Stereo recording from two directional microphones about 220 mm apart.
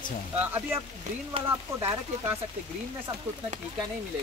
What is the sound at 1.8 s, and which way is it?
Speech, 10° right (ahead or behind).